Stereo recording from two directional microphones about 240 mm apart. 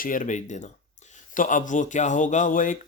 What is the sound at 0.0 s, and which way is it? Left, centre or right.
Speech, left.